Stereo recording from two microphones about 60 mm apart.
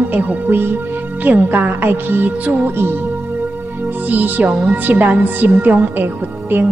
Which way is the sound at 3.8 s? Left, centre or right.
Right.